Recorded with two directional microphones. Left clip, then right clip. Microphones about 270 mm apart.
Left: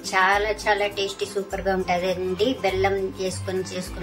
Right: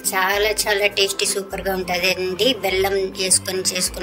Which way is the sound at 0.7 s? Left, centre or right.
Right.